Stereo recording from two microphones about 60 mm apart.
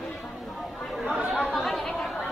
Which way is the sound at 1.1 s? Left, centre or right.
Centre.